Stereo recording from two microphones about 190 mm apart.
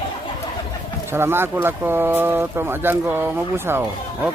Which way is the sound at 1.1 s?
10° right (ahead or behind).